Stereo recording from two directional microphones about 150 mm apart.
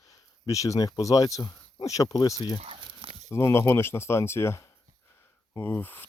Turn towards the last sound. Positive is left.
turn(degrees=10)  # may be behind; listen again after turning